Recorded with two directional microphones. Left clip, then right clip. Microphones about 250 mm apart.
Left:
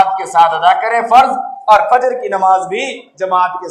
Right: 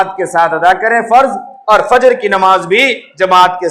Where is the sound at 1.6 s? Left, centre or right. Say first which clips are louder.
Right 2 dB; right.